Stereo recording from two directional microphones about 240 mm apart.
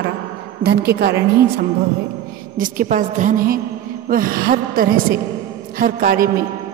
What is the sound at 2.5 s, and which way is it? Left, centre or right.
A woman's voice, right.